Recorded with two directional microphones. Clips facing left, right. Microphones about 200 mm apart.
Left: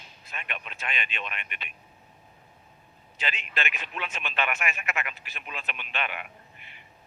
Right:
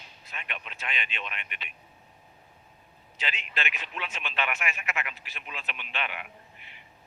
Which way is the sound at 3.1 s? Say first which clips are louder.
Left 2 dB; 50° left (ahead or behind).